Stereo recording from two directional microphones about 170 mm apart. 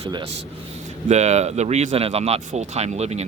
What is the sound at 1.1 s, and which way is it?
Speech, 40° right (ahead or behind).